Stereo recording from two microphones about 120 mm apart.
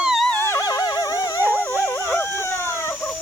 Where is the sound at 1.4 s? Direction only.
20° left (ahead or behind).